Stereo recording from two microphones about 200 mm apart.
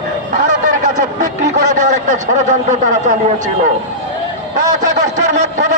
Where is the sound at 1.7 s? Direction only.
40° right (ahead or behind).